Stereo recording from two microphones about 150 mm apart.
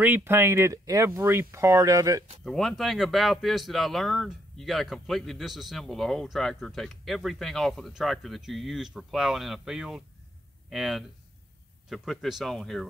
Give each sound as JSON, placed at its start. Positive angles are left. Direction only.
{"t": 0.0, "sound": "speech", "side_deg": -15}
{"t": 2.4, "sound": "speech", "side_deg": 0}